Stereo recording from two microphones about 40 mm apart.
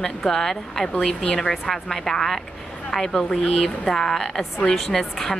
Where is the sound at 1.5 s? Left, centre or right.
Centre.